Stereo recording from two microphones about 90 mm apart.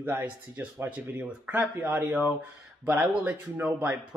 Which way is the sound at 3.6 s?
5° right (ahead or behind).